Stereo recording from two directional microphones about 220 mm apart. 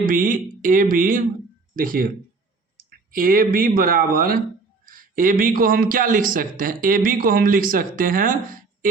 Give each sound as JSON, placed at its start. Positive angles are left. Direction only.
{"t": 0.0, "sound": "a man's voice", "side_deg": -40}